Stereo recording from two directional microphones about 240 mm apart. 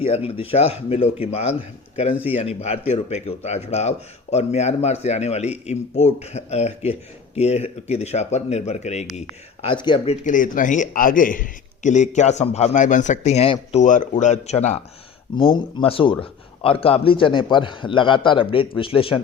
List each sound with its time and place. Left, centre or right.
0.0 s speech: left
10.2 s a man's voice: left